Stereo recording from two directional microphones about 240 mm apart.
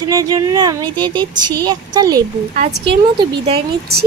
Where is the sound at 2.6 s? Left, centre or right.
Right.